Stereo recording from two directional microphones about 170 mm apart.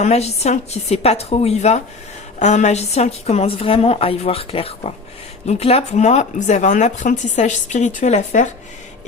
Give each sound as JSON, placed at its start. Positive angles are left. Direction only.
{"t": 0.0, "sound": "a woman's voice", "side_deg": 40}